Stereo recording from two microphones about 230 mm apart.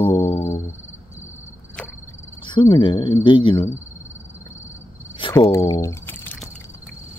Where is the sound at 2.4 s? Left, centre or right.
Centre.